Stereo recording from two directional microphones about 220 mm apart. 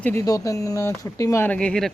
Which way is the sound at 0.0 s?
10° left (ahead or behind).